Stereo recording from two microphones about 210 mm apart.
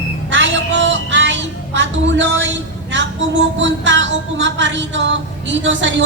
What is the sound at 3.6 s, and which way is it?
Music, 60° right (ahead or behind).